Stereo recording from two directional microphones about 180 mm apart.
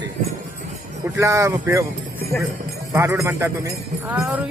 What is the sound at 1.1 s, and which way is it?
Speech, 15° right (ahead or behind).